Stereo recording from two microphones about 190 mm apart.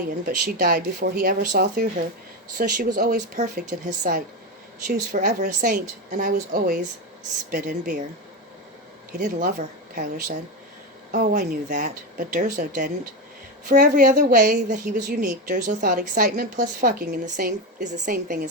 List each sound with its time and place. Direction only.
0.3 s a woman's voice: 50° right (ahead or behind)
9.1 s a woman's voice: 50° right (ahead or behind)